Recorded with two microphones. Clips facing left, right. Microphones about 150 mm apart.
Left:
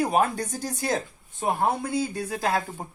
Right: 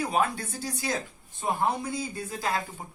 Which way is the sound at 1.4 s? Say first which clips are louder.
Left 3 dB; 60° left (ahead or behind).